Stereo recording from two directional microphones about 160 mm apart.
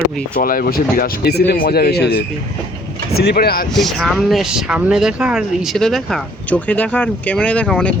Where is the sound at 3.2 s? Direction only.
85° left.